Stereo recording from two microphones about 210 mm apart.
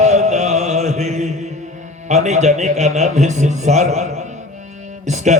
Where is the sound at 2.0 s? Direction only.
35° right (ahead or behind).